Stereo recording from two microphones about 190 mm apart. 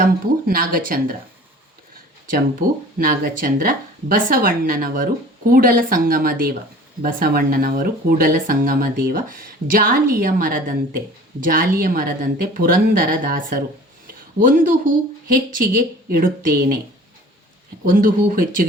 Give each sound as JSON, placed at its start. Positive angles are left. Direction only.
{"t": 0.0, "sound": "speech", "side_deg": -50}
{"t": 2.3, "sound": "speech", "side_deg": -50}
{"t": 17.8, "sound": "speech", "side_deg": -45}